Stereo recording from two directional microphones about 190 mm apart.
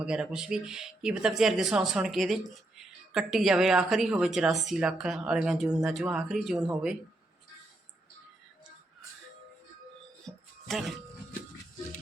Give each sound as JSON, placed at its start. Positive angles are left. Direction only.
{"t": 0.0, "sound": "speech", "side_deg": -5}
{"t": 10.2, "sound": "music", "side_deg": 0}